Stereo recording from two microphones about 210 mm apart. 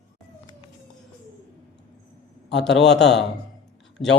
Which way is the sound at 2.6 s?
Centre (ahead or behind).